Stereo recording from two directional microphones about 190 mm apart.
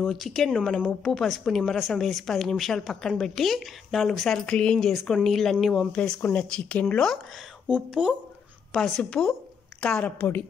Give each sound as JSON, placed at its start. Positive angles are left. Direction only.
{"t": 0.0, "sound": "speech", "side_deg": 0}
{"t": 7.6, "sound": "a woman's voice", "side_deg": -5}